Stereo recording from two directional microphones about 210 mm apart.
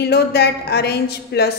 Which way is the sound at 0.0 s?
50° left (ahead or behind).